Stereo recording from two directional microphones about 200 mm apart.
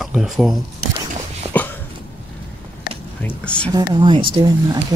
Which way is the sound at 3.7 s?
20° right (ahead or behind).